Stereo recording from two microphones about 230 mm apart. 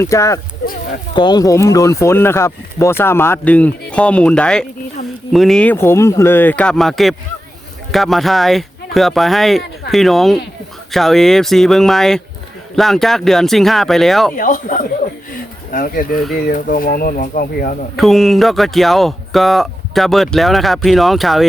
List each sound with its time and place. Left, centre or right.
0.0 s speech: centre
14.3 s speech: left
17.9 s speech: centre